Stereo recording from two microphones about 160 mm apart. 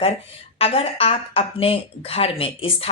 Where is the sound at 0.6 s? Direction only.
35° left (ahead or behind).